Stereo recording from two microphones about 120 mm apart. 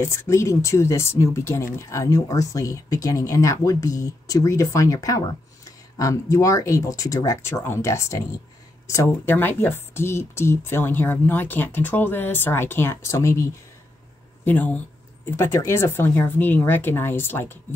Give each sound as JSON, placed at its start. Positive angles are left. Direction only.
{"t": 0.1, "sound": "speech", "side_deg": 20}